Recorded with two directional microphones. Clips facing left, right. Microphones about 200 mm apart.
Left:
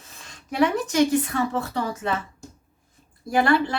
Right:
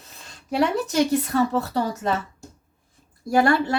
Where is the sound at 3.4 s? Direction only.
45° right (ahead or behind).